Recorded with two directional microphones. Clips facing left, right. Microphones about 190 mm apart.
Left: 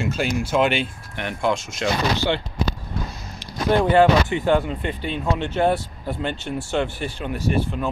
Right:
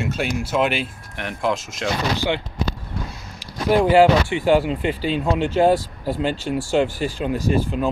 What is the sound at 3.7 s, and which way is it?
Speech, 10° right (ahead or behind).